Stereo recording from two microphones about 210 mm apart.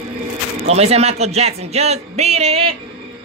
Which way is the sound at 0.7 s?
30° right (ahead or behind).